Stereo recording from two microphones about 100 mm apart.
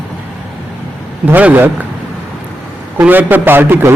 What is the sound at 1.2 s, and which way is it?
Speech, 15° right (ahead or behind).